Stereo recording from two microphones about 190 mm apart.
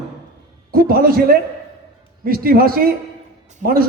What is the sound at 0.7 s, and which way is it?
A man's voice, 50° right (ahead or behind).